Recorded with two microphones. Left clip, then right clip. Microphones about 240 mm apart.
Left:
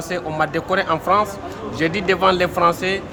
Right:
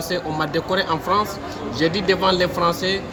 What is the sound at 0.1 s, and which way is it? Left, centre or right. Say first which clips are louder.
Speech: left 2 dB; centre.